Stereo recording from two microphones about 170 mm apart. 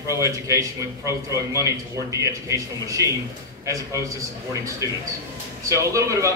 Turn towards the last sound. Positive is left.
turn(degrees=-20)  # may be behind; listen again after turning